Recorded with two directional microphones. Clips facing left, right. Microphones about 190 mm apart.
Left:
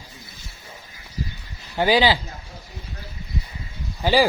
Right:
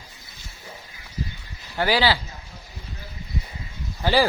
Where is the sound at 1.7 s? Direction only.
15° left (ahead or behind).